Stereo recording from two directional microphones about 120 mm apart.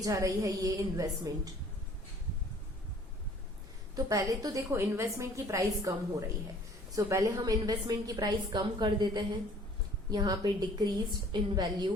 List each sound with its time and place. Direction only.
0.0 s a woman's voice: 30° right (ahead or behind)
3.9 s a woman's voice: 30° right (ahead or behind)